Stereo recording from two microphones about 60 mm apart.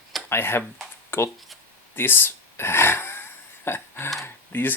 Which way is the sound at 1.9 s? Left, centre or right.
Left.